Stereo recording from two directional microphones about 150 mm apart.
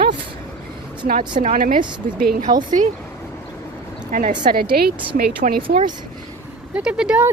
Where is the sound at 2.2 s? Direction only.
80° right.